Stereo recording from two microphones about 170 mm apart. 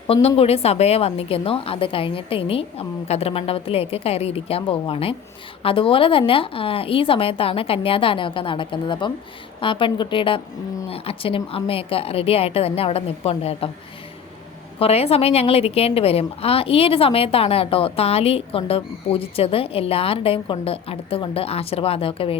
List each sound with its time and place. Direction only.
0.1 s a woman's voice: 35° left (ahead or behind)
14.8 s a woman's voice: 35° left (ahead or behind)